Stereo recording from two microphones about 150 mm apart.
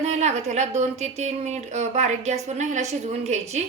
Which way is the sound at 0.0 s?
45° right (ahead or behind).